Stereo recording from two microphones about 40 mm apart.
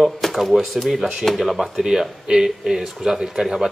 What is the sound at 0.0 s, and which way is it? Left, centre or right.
Speech, centre.